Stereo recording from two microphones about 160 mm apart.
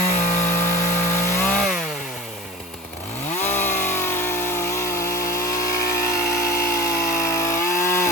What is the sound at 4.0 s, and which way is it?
Chainsaw, 15° left (ahead or behind).